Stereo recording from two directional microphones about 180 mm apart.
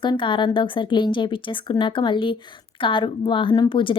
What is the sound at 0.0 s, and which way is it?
A woman's voice, 25° left (ahead or behind).